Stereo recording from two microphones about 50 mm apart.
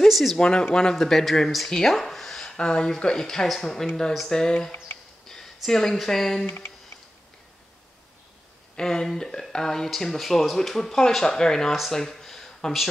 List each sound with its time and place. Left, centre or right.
0.1 s speech: centre
0.4 s speech: centre
8.7 s speech: centre
11.9 s a sound: centre